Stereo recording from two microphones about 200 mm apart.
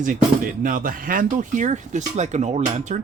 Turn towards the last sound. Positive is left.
turn(degrees=-40)  # may be behind; listen again after turning